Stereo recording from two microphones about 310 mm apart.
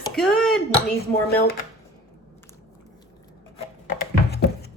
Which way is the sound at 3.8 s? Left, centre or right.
Left.